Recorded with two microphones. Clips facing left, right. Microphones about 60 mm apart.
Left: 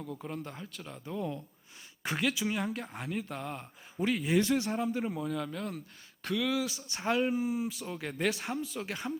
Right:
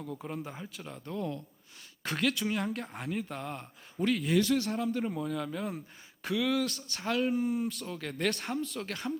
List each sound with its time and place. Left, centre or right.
0.0 s speech: centre
4.4 s a man's voice: left; by 6.8 s centre
6.8 s speech: centre
7.2 s speech: centre